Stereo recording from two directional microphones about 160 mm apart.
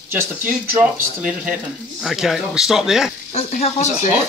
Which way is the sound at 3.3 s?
45° left (ahead or behind).